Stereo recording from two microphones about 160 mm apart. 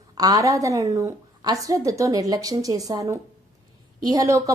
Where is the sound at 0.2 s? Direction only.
20° right (ahead or behind).